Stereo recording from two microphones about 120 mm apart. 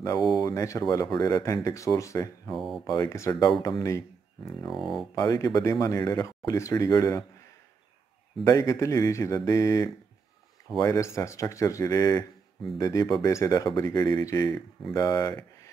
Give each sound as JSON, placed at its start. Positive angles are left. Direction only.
{"t": 0.4, "sound": "speech", "side_deg": 25}
{"t": 2.5, "sound": "speech", "side_deg": 0}
{"t": 2.9, "sound": "speech", "side_deg": 30}
{"t": 4.6, "sound": "speech", "side_deg": 0}
{"t": 5.1, "sound": "speech", "side_deg": 30}
{"t": 8.5, "sound": "speech", "side_deg": 30}